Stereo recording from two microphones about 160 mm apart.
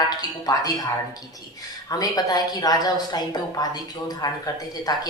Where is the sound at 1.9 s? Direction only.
25° left (ahead or behind).